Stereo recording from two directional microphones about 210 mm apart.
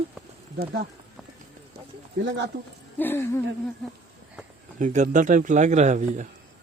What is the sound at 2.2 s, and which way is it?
Speech, 60° right (ahead or behind).